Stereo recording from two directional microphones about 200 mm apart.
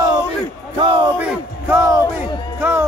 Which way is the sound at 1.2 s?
10° right (ahead or behind).